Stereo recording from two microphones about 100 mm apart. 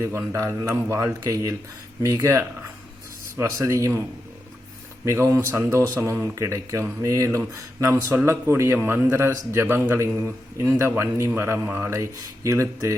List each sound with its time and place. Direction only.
0.0 s speech: 30° right (ahead or behind)
5.1 s a man's voice: 30° right (ahead or behind)